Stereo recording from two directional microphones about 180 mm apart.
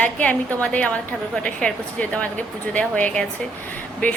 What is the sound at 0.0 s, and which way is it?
A woman's voice, 5° left (ahead or behind).